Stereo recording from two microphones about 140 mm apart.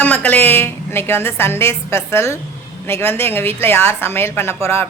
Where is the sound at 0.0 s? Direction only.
10° left (ahead or behind).